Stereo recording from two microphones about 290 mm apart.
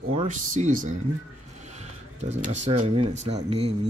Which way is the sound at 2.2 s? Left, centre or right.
Right.